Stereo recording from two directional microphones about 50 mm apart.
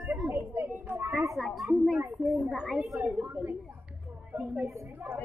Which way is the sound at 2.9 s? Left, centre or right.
Right.